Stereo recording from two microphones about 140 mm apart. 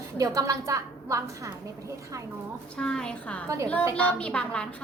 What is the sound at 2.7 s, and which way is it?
Speech, 5° left (ahead or behind).